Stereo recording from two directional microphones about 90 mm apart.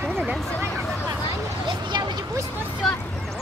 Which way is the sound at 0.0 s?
10° left (ahead or behind).